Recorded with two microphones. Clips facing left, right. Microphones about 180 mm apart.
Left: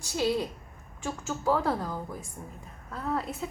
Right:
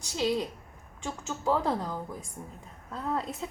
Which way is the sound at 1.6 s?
15° right (ahead or behind).